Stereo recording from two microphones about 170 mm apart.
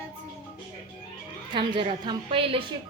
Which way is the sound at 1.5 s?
30° right (ahead or behind).